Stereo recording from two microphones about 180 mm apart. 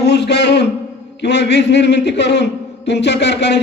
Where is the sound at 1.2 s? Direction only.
75° left (ahead or behind).